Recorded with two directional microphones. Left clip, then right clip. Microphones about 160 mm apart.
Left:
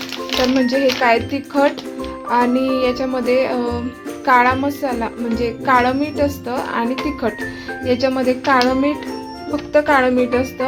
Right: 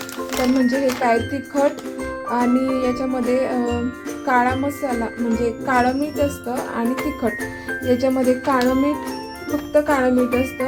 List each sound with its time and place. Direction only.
0.8 s speech: centre (ahead or behind)
3.0 s speech: 25° left (ahead or behind)
3.2 s speech: centre (ahead or behind)